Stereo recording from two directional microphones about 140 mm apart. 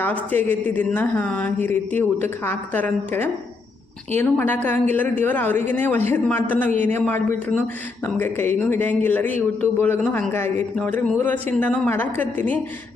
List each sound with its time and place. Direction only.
0.0 s a woman's voice: 15° left (ahead or behind)